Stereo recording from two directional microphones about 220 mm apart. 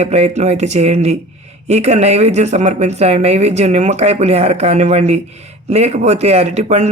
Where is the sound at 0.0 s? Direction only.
30° right (ahead or behind).